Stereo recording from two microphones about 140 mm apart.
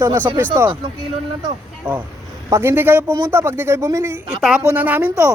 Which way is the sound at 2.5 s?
20° right (ahead or behind).